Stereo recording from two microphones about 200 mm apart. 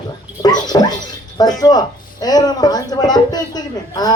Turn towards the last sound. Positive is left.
turn(degrees=20)  # may be behind; listen again after turning